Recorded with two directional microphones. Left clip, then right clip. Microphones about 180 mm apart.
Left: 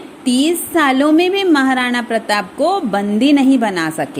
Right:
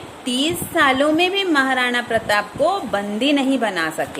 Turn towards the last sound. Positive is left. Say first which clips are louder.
# left 3 dB
turn(degrees=30)  # may be behind; listen again after turning